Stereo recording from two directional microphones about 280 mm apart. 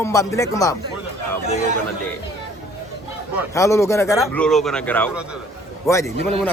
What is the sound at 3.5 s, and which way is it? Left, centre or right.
Speech, centre.